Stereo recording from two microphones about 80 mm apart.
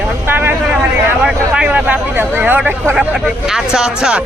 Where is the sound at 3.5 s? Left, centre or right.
Centre.